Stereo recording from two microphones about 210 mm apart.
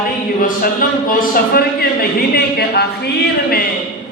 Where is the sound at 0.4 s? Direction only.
45° left (ahead or behind).